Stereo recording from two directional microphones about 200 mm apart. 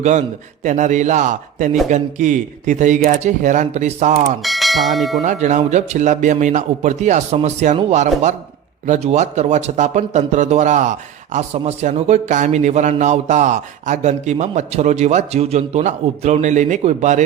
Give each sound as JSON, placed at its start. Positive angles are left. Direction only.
{"t": 0.0, "sound": "a man's voice", "side_deg": -35}
{"t": 4.4, "sound": "speech", "side_deg": 0}
{"t": 5.2, "sound": "a man's voice", "side_deg": -35}